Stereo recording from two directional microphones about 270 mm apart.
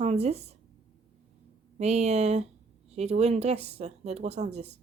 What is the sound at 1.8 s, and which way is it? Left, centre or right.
Speech, right.